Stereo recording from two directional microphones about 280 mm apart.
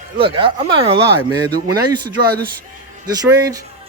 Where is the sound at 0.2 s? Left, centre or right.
Centre.